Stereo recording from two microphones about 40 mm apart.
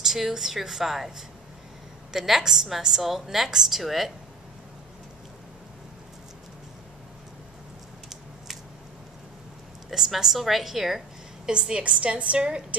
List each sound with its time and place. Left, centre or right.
0.0 s a woman's voice: centre
9.8 s a woman's voice: centre
11.4 s a woman's voice: centre